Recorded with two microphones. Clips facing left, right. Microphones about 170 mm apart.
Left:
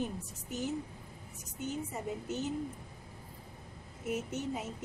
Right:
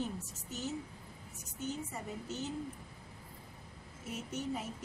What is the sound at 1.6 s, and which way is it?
Speech, 15° left (ahead or behind).